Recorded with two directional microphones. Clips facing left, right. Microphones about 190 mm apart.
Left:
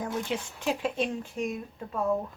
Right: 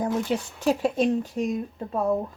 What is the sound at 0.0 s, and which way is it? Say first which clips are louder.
Speech: right 6 dB; 40° right (ahead or behind).